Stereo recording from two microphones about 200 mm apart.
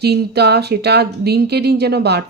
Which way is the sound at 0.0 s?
55° right (ahead or behind).